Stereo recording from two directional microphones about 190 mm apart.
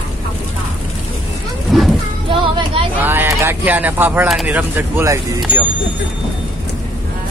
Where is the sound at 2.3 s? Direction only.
25° right (ahead or behind).